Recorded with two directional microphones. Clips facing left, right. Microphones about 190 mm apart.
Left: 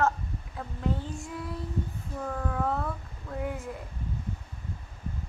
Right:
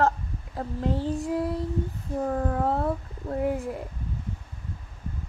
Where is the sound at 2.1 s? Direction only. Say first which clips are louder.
Right 6 dB; 35° right (ahead or behind).